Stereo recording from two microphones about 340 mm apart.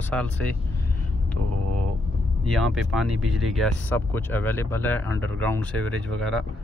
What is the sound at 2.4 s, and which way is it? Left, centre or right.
Speech, centre.